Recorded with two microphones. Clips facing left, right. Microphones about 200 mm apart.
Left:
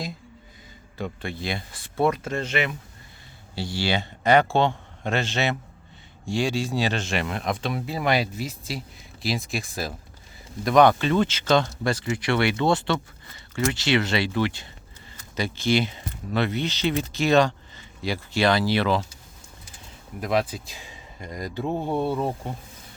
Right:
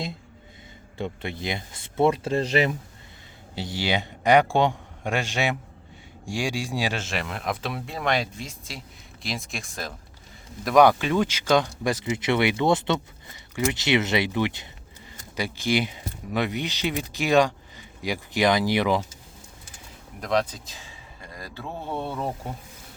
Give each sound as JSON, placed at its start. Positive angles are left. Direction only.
{"t": 0.9, "sound": "speech", "side_deg": -20}
{"t": 3.5, "sound": "speech", "side_deg": -20}
{"t": 20.2, "sound": "speech", "side_deg": 5}